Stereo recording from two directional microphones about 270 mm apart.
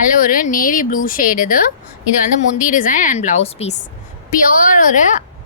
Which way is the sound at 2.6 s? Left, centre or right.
Left.